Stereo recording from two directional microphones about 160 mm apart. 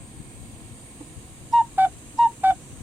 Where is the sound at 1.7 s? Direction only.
5° right (ahead or behind).